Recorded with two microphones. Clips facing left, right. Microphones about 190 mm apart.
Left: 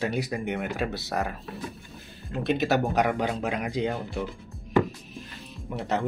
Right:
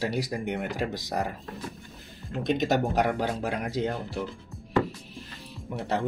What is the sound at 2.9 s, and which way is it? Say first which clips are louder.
Speech: left 1 dB; 15° left (ahead or behind).